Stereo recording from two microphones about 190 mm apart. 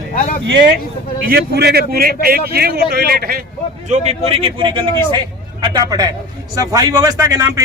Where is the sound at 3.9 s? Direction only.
30° right (ahead or behind).